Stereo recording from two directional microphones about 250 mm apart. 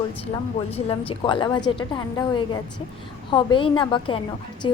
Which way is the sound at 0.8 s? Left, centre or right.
Left.